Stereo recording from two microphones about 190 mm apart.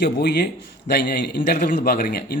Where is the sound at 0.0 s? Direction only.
55° left (ahead or behind).